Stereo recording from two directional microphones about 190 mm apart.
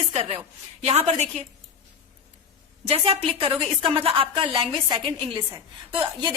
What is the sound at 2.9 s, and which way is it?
A woman's voice, 30° right (ahead or behind).